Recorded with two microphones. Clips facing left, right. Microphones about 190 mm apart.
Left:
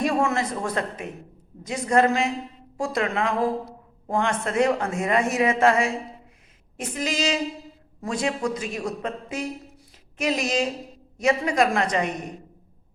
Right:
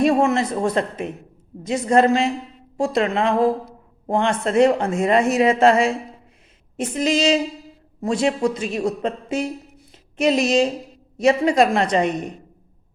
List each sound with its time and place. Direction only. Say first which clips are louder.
0.0 s a man's voice: right 6 dB; 25° right (ahead or behind)